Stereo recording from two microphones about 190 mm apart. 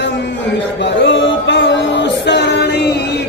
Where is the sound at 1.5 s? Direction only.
65° left (ahead or behind).